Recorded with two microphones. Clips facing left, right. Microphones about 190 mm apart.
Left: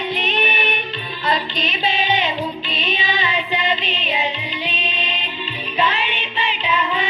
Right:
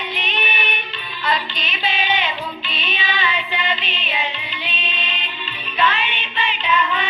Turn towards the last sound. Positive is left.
turn(degrees=35)  # may be behind; listen again after turning